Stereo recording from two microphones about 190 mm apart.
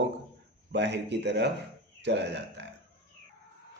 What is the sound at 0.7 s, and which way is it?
A man's voice, 65° right (ahead or behind).